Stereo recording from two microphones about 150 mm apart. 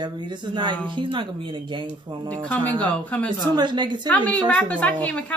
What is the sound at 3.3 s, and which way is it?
Speech, 30° right (ahead or behind).